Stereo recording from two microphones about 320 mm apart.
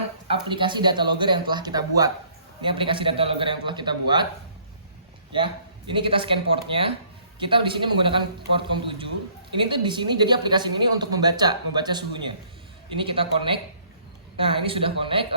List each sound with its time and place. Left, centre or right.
0.4 s a man's voice: centre
5.9 s a man's voice: centre